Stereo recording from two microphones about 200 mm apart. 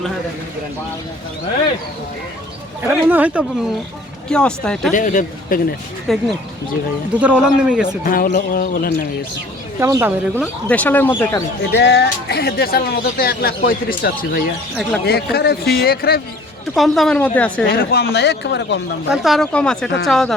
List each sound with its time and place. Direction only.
2.8 s speech: 10° right (ahead or behind)
4.3 s speech: 5° left (ahead or behind)
4.9 s speech: 40° left (ahead or behind)
6.1 s speech: centre (ahead or behind)
8.0 s speech: 45° left (ahead or behind)
9.8 s speech: 10° right (ahead or behind)
10.7 s speech: 10° left (ahead or behind)
11.7 s speech: 60° left (ahead or behind)
16.7 s speech: centre (ahead or behind)
17.7 s speech: 50° left (ahead or behind)
19.1 s speech: centre (ahead or behind)